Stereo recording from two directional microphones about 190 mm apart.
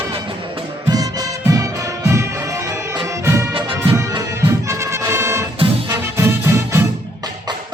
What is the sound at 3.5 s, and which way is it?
Music, 30° right (ahead or behind).